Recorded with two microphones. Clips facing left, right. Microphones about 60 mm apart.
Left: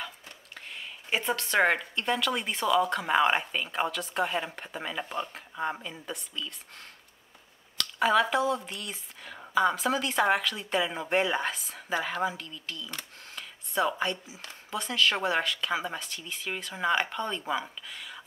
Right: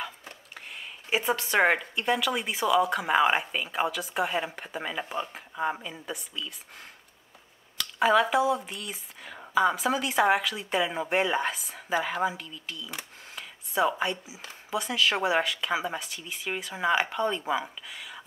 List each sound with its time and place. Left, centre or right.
0.6 s speech: centre
7.7 s speech: centre